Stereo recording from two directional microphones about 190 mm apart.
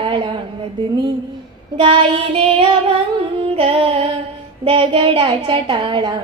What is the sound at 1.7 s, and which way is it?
Child singing, 30° right (ahead or behind).